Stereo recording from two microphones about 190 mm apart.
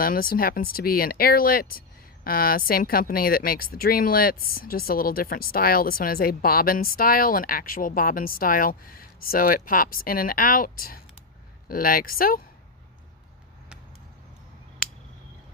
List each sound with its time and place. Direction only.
0.0 s speech: 50° left (ahead or behind)